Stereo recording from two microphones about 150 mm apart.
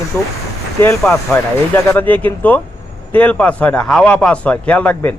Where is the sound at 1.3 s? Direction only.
15° left (ahead or behind).